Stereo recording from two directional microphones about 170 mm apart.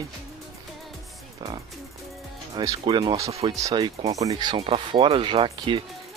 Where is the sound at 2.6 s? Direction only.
25° right (ahead or behind).